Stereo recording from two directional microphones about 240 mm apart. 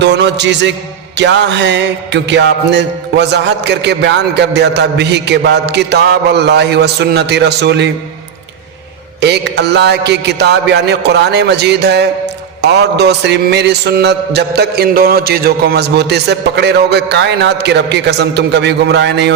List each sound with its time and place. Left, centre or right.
0.0 s music: right
9.2 s music: right